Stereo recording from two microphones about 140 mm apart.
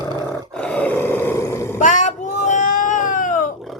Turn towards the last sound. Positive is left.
turn(degrees=70)  # may be behind; listen again after turning